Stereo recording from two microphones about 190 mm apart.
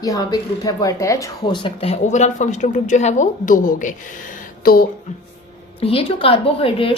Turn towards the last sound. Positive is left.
turn(degrees=30)  # may be behind; listen again after turning